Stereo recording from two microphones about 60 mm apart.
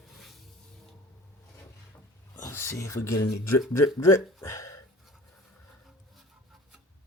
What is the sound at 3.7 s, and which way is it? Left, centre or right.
Speech, left.